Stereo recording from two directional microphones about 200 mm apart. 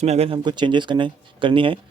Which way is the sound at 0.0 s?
30° right (ahead or behind).